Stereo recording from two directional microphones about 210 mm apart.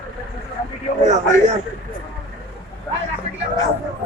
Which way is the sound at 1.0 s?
35° right (ahead or behind).